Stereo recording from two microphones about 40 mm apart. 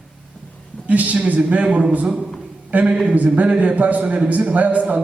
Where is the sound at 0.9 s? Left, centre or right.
Right.